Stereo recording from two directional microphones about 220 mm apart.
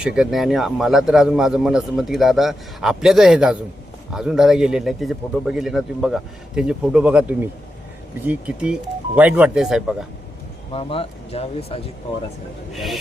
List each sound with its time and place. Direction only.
0.0 s speech: centre (ahead or behind)
10.8 s speech: 25° left (ahead or behind)
12.7 s speech: centre (ahead or behind)